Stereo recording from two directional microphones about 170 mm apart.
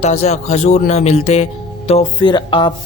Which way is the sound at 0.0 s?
40° left (ahead or behind).